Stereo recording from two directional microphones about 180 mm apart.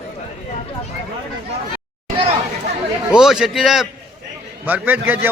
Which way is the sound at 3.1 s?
5° right (ahead or behind).